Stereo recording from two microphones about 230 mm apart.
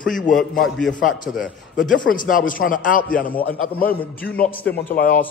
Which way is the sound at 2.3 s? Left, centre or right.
Left.